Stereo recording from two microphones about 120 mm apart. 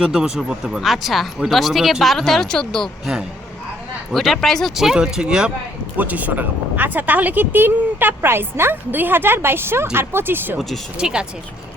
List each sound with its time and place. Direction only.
0.0 s speech: 5° right (ahead or behind)
10.9 s speech: 5° right (ahead or behind)